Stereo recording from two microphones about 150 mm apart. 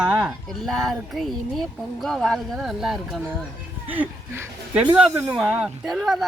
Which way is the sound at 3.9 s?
15° right (ahead or behind).